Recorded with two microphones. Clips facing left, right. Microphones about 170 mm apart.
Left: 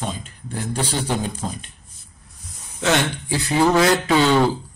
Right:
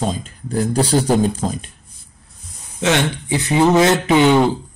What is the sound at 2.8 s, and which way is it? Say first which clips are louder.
Speech: right 2 dB; 20° right (ahead or behind).